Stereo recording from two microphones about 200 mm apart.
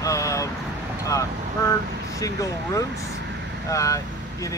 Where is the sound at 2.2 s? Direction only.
15° left (ahead or behind).